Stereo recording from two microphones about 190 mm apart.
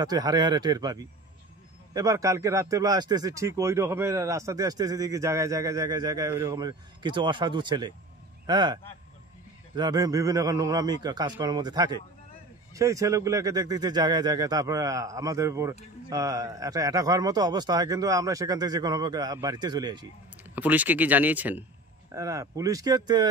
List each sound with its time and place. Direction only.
0.0 s a man's voice: 20° right (ahead or behind)
2.0 s a man's voice: 15° right (ahead or behind)
9.8 s a man's voice: 20° right (ahead or behind)
20.5 s speech: 10° right (ahead or behind)